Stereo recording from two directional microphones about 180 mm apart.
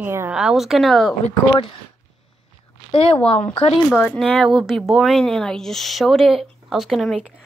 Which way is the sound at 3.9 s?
10° left (ahead or behind).